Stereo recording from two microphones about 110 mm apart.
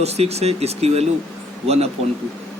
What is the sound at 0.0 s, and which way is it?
Speech, 75° right (ahead or behind).